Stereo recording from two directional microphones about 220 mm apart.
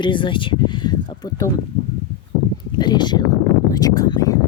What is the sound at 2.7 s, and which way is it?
Speech, 20° left (ahead or behind).